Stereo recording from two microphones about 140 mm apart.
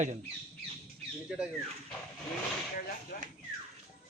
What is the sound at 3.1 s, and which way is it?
Speech, 90° left.